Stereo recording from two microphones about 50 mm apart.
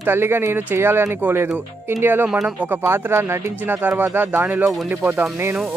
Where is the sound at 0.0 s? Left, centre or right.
Right.